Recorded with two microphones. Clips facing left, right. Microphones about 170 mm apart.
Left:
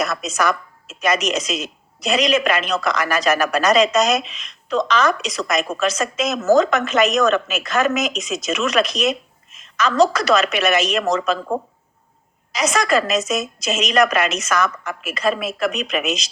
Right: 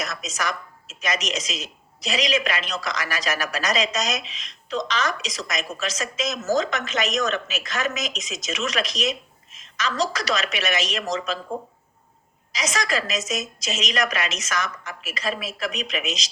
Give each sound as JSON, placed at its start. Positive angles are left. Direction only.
{"t": 0.0, "sound": "a woman's voice", "side_deg": 60}